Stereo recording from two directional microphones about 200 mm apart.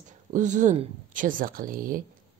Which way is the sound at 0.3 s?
40° right (ahead or behind).